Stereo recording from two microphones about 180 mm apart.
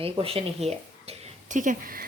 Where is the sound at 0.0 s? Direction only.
30° right (ahead or behind).